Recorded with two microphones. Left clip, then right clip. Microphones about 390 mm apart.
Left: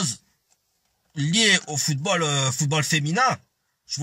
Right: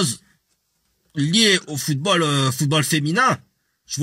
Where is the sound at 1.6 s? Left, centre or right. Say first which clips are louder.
Right 2 dB; centre.